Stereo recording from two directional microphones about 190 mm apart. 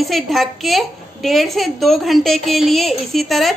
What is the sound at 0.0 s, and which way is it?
A woman's voice, centre (ahead or behind).